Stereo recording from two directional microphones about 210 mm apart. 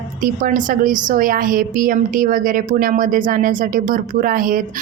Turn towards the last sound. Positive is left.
turn(degrees=-40)  # may be behind; listen again after turning